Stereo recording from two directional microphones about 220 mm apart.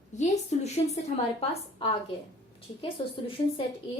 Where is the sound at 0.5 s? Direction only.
30° left (ahead or behind).